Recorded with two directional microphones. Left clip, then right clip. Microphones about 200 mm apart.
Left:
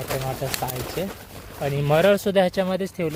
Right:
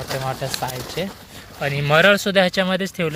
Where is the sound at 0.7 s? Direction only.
10° left (ahead or behind).